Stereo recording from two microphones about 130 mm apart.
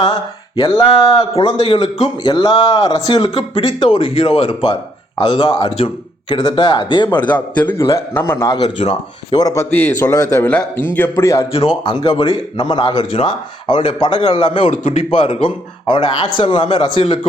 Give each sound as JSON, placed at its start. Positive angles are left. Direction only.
{"t": 0.0, "sound": "a man's voice", "side_deg": 40}
{"t": 7.9, "sound": "a man's voice", "side_deg": 20}
{"t": 8.4, "sound": "a man's voice", "side_deg": 35}
{"t": 9.6, "sound": "a man's voice", "side_deg": 15}
{"t": 11.8, "sound": "a man's voice", "side_deg": 40}
{"t": 13.0, "sound": "a man's voice", "side_deg": 55}
{"t": 13.2, "sound": "a man's voice", "side_deg": 40}
{"t": 14.6, "sound": "a man's voice", "side_deg": 60}
{"t": 15.1, "sound": "a man's voice", "side_deg": 45}